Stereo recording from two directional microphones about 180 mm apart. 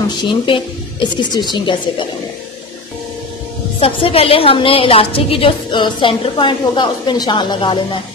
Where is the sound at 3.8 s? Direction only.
30° left (ahead or behind).